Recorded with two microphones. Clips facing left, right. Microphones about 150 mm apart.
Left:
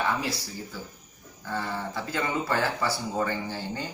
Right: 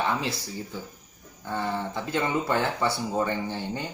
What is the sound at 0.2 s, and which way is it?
Speech, 20° right (ahead or behind).